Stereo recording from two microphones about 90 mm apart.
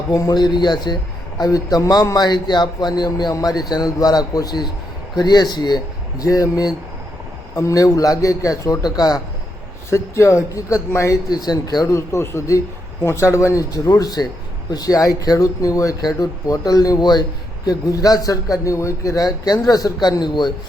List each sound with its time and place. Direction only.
0.1 s a man's voice: 45° left (ahead or behind)
9.9 s a man's voice: 30° left (ahead or behind)
11.3 s a man's voice: 45° left (ahead or behind)